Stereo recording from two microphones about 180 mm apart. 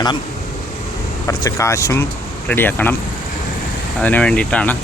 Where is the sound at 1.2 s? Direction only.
20° left (ahead or behind).